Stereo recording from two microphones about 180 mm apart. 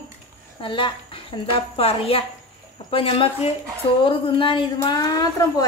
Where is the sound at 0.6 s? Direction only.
30° left (ahead or behind).